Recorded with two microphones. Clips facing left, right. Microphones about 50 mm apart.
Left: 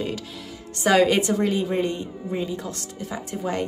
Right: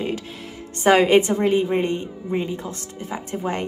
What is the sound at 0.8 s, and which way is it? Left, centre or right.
Speech, right.